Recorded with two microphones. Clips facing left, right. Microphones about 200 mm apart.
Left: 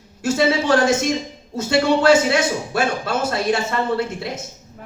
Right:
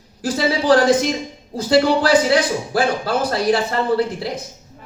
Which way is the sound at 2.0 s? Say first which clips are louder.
Even; 25° left (ahead or behind).